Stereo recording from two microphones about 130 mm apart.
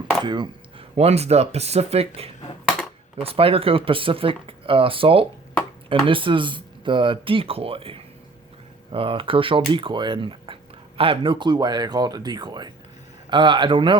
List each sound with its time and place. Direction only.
0.3 s speech: 35° right (ahead or behind)